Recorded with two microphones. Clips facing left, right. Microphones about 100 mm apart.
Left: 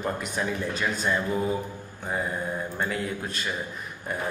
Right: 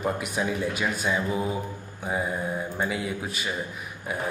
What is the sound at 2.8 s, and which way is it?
Speech, 10° right (ahead or behind).